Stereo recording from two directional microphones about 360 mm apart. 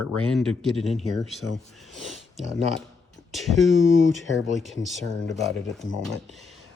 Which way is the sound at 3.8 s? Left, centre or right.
Left.